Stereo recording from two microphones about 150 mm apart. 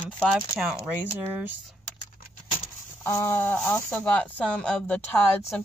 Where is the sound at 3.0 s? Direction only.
15° left (ahead or behind).